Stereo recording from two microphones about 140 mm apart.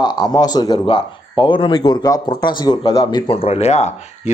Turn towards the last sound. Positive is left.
turn(degrees=55)  # may be behind; listen again after turning